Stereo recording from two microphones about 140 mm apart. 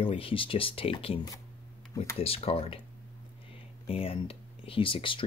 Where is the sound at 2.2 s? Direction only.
45° left (ahead or behind).